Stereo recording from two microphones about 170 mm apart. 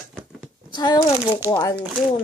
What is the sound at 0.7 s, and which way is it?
A child's voice, 25° left (ahead or behind).